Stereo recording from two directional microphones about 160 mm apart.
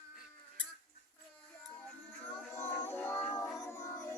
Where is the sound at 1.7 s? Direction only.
10° left (ahead or behind).